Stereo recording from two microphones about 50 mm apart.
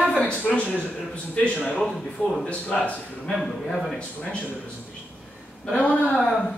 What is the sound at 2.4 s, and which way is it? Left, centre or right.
Speech, left.